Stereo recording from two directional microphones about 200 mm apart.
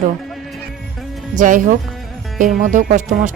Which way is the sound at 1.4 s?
40° right (ahead or behind).